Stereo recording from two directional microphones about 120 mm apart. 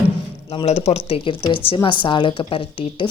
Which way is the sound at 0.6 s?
60° left (ahead or behind).